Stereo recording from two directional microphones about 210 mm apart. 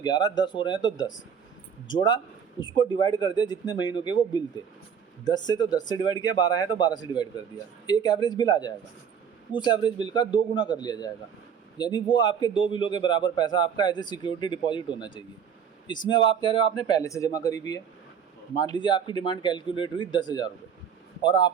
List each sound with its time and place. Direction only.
0.0 s a man's voice: 20° left (ahead or behind)